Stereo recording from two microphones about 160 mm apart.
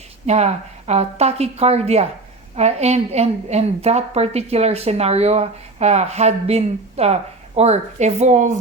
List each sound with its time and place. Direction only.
0.3 s a woman's voice: 45° right (ahead or behind)